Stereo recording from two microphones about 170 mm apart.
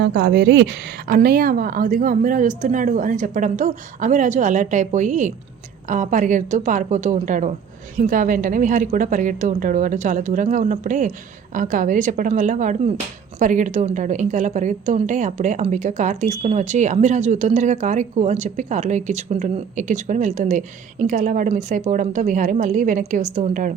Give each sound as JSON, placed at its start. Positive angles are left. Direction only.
{"t": 0.0, "sound": "a woman's voice", "side_deg": -70}